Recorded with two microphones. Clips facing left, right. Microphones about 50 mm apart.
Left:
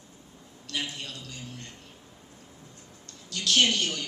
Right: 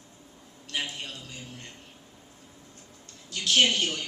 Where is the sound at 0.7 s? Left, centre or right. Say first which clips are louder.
Right 1 dB; right.